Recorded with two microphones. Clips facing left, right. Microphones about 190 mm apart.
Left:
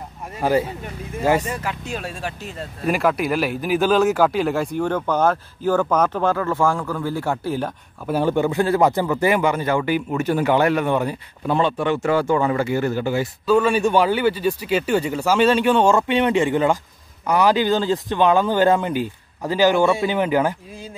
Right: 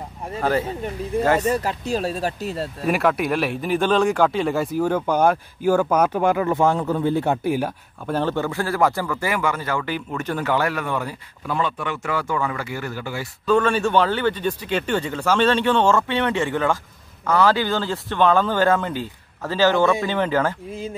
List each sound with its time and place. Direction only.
0.4 s speech: 10° left (ahead or behind)
1.4 s speech: 35° right (ahead or behind)
2.8 s speech: centre (ahead or behind)
8.1 s speech: 10° left (ahead or behind)
13.5 s speech: 10° left (ahead or behind)